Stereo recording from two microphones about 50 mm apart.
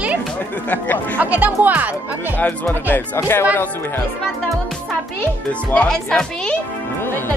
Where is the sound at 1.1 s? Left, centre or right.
Right.